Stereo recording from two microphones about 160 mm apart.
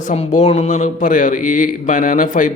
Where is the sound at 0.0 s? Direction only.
45° left (ahead or behind).